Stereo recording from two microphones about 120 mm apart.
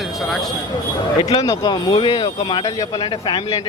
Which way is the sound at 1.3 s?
30° left (ahead or behind).